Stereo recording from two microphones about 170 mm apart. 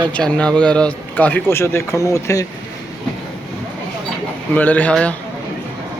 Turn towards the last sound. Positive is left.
turn(degrees=5)  # may be behind; listen again after turning